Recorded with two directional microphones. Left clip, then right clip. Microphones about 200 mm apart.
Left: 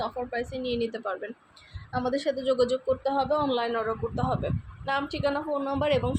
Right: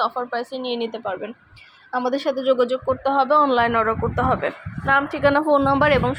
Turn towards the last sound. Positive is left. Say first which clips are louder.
# right 8 dB
turn(degrees=-15)  # may be behind; listen again after turning